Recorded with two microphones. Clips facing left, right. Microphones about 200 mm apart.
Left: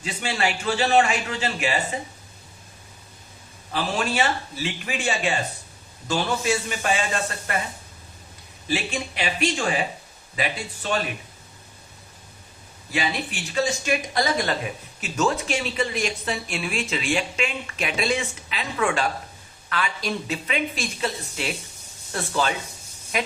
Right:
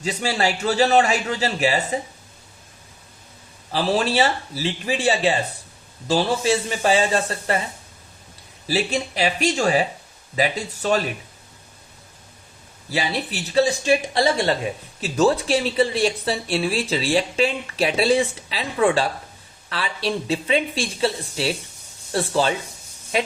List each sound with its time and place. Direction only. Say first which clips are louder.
0.0 s speech: right 4 dB; 40° right (ahead or behind)
3.7 s speech: right 5 dB; 35° right (ahead or behind)
8.6 s speech: right 4 dB; 35° right (ahead or behind)
12.9 s speech: right 2 dB; 35° right (ahead or behind)